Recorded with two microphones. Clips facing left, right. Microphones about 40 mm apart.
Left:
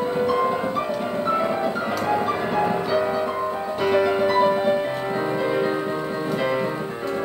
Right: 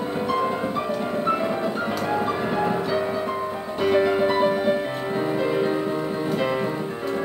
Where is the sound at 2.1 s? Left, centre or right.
Centre.